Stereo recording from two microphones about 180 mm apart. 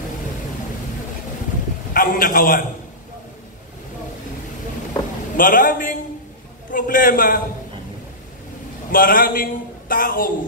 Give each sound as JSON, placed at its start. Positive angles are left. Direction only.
{"t": 2.0, "sound": "a man's voice", "side_deg": 50}
{"t": 5.4, "sound": "a man's voice", "side_deg": 50}
{"t": 8.9, "sound": "a man's voice", "side_deg": 50}